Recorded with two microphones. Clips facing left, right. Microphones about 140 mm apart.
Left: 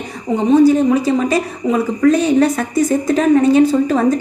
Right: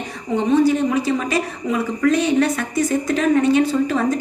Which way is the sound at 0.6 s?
40° left (ahead or behind).